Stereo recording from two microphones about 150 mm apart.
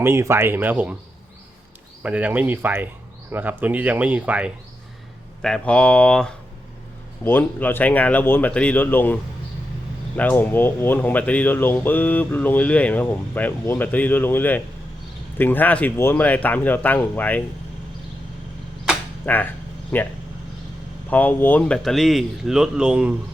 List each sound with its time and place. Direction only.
0.0 s speech: 20° right (ahead or behind)
2.0 s speech: 10° right (ahead or behind)
5.4 s speech: 5° left (ahead or behind)
10.2 s speech: 15° left (ahead or behind)
19.2 s a sound: 10° left (ahead or behind)
21.1 s speech: 10° left (ahead or behind); by 23.1 s 5° right (ahead or behind)